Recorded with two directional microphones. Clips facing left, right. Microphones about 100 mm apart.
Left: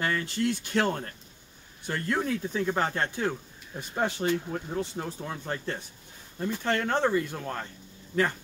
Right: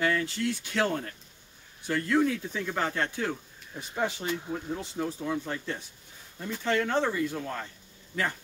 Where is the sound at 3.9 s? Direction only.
55° left (ahead or behind).